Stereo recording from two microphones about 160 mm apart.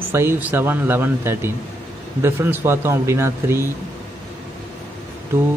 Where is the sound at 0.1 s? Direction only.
15° right (ahead or behind).